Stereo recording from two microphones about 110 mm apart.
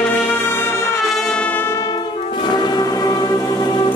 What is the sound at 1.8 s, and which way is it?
Brass instrument, 40° left (ahead or behind).